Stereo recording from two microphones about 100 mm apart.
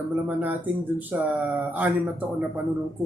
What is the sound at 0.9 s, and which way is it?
Speech, 15° right (ahead or behind).